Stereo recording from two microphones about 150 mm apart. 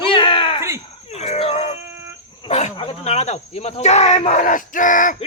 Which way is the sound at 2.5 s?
45° left (ahead or behind).